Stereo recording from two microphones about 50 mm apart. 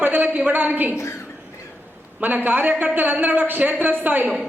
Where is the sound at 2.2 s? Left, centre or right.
Right.